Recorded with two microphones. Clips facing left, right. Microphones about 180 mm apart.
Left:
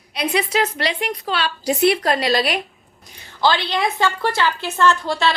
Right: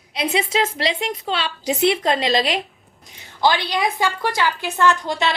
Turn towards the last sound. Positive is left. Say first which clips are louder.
# left 1 dB
turn(degrees=-15)  # may be behind; listen again after turning